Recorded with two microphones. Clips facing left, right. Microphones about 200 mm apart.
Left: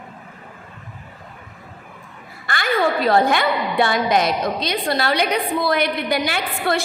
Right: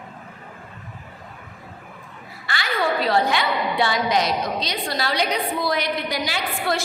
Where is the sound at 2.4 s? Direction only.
50° left (ahead or behind).